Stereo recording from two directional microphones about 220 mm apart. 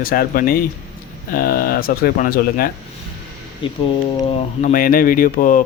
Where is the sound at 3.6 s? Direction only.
25° left (ahead or behind).